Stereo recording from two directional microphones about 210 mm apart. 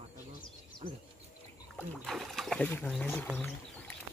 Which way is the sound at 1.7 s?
Centre (ahead or behind).